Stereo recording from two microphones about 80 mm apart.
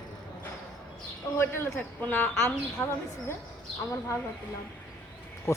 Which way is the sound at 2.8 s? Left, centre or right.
Centre.